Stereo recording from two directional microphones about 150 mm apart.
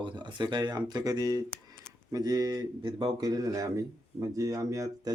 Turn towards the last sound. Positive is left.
turn(degrees=-20)  # may be behind; listen again after turning